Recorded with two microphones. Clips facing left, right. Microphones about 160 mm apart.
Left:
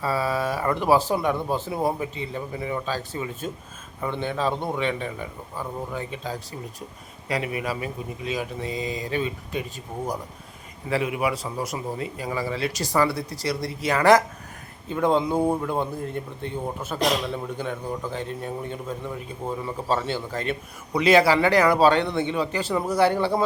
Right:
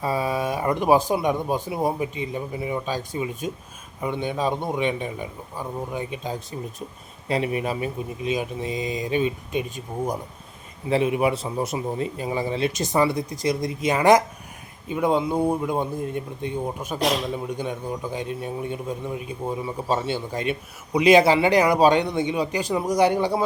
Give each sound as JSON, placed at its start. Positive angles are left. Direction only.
{"t": 0.0, "sound": "a man's voice", "side_deg": -15}
{"t": 15.3, "sound": "speech", "side_deg": 0}
{"t": 15.6, "sound": "a man's voice", "side_deg": -15}